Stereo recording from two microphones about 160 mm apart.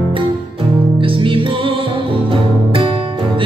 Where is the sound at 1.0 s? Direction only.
35° right (ahead or behind).